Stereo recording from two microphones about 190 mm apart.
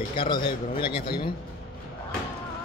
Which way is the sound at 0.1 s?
30° left (ahead or behind).